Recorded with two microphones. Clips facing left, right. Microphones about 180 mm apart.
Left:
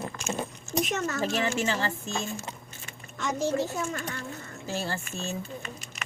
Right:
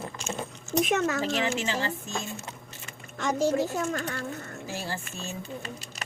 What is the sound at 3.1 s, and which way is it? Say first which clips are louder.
A child's voice: right 3 dB; 50° right (ahead or behind).